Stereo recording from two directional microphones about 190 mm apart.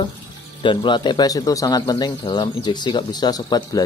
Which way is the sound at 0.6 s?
25° left (ahead or behind).